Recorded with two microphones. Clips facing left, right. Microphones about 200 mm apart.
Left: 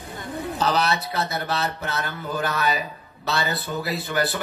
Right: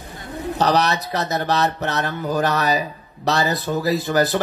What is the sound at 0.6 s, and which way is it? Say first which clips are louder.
Speech: right 4 dB; 40° right (ahead or behind).